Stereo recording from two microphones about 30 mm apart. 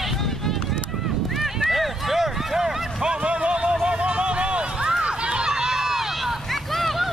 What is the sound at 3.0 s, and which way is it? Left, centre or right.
Music, right.